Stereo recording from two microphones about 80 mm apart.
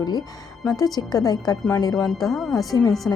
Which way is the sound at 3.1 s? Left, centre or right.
Left.